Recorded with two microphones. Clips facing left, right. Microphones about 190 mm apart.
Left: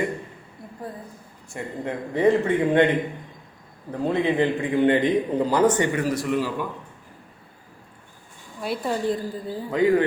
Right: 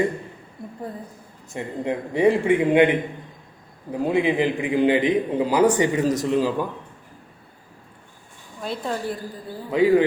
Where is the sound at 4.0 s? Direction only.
10° right (ahead or behind).